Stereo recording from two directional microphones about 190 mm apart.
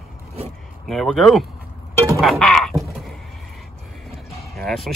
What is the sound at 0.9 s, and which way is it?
Speech, centre (ahead or behind).